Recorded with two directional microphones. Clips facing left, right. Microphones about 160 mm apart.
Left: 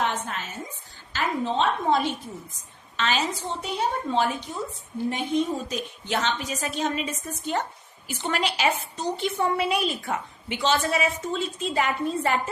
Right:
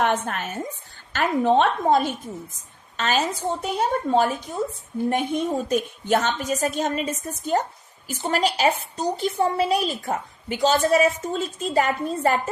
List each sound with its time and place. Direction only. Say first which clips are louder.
0.0 s a woman's voice: right 5 dB; 55° right (ahead or behind)